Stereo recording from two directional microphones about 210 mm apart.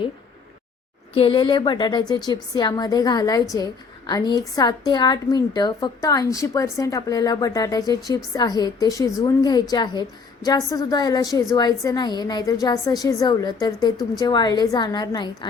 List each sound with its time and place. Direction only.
1.1 s a woman's voice: 25° left (ahead or behind)